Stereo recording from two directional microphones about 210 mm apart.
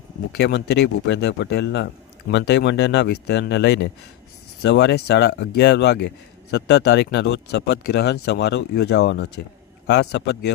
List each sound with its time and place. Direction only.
0.3 s speech: 55° left (ahead or behind)